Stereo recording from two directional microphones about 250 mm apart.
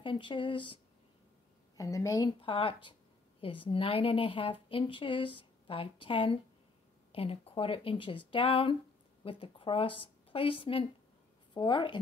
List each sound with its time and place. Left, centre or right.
0.0 s speech: centre
1.8 s a woman's voice: centre